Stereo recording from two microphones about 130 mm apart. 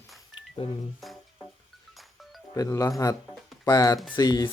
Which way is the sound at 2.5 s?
25° left (ahead or behind).